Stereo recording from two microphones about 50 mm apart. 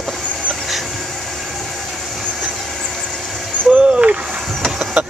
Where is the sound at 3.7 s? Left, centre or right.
Right.